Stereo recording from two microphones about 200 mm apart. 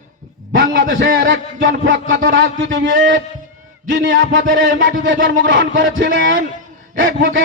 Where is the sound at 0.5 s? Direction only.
70° right (ahead or behind).